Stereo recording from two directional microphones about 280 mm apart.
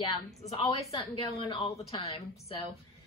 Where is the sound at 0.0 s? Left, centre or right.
Centre.